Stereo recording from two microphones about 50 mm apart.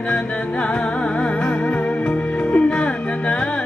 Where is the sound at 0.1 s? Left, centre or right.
Left.